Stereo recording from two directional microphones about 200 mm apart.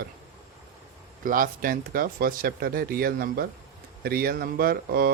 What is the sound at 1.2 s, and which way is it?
A man's voice, 45° right (ahead or behind).